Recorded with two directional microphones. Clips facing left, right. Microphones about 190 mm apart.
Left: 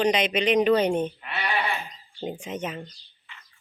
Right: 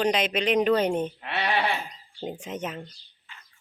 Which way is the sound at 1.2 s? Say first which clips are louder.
Right 2 dB; 70° right (ahead or behind).